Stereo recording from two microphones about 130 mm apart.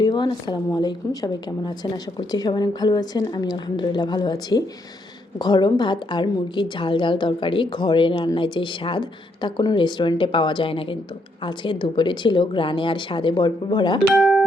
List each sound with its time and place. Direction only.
0.0 s a woman's voice: 35° left (ahead or behind)
14.1 s speech: 5° right (ahead or behind)